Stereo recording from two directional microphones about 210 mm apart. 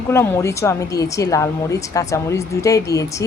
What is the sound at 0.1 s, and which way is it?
A woman's voice, 15° left (ahead or behind).